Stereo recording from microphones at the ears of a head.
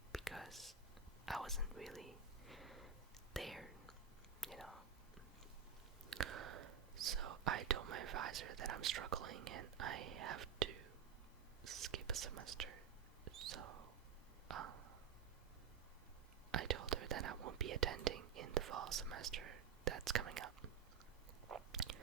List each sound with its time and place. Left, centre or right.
0.1 s whispering: centre
6.1 s whispering: right
13.2 s mouse: right
14.4 s a sound: right
16.5 s whispering: right
21.4 s chewing: right